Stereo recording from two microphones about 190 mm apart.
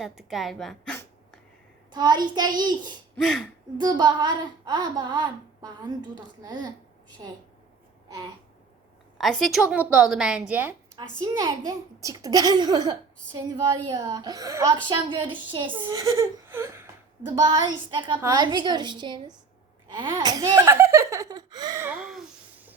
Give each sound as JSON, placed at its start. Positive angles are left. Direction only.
{"t": 0.0, "sound": "a woman's voice", "side_deg": 0}
{"t": 1.9, "sound": "a woman's voice", "side_deg": -20}
{"t": 3.2, "sound": "a woman's voice", "side_deg": 0}
{"t": 3.8, "sound": "a woman's voice", "side_deg": -20}
{"t": 9.1, "sound": "a woman's voice", "side_deg": 0}
{"t": 11.2, "sound": "a woman's voice", "side_deg": -25}
{"t": 17.5, "sound": "a woman's voice", "side_deg": -25}
{"t": 21.8, "sound": "a woman's voice", "side_deg": -5}